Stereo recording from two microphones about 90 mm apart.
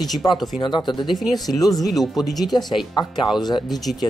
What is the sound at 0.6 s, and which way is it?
Speech, 60° left (ahead or behind).